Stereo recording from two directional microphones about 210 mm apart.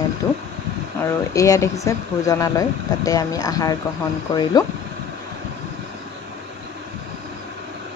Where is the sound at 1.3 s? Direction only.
15° left (ahead or behind).